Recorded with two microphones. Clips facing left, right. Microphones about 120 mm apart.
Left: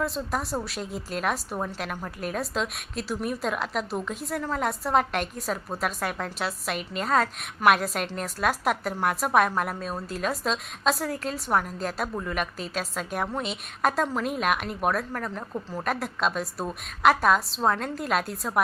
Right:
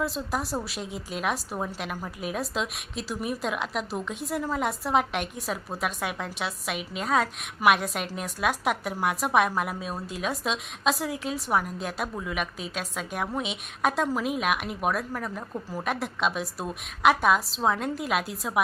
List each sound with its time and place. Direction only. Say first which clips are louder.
0.0 s a woman's voice: left 1 dB; centre (ahead or behind)